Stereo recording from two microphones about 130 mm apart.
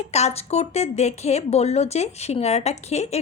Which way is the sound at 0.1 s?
55° left (ahead or behind).